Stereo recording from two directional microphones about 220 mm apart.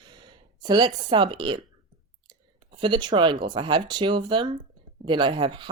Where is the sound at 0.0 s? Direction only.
20° right (ahead or behind).